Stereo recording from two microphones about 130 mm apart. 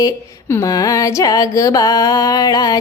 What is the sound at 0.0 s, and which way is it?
Music, 25° left (ahead or behind).